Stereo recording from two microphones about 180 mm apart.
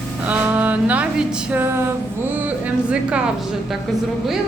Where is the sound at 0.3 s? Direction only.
10° right (ahead or behind).